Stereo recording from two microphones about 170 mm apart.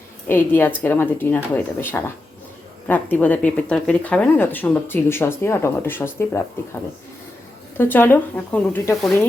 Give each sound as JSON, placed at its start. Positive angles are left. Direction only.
{"t": 0.3, "sound": "speech", "side_deg": 10}
{"t": 7.8, "sound": "speech", "side_deg": 10}